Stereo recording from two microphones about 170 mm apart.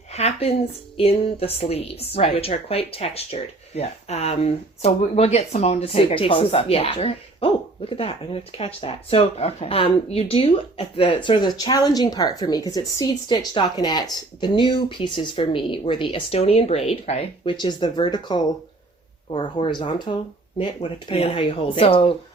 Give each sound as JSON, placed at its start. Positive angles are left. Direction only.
{"t": 0.1, "sound": "a woman's voice", "side_deg": 40}